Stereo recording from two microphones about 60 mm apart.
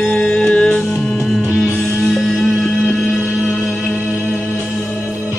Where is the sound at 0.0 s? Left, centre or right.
Centre.